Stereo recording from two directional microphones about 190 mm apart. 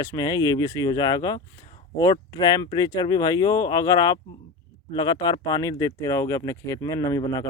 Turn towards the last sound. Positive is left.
turn(degrees=20)  # may be behind; listen again after turning